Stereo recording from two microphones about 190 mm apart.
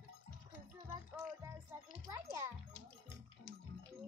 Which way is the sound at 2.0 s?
15° right (ahead or behind).